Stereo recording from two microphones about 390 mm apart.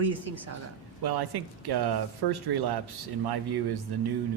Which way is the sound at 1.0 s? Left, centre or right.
Right.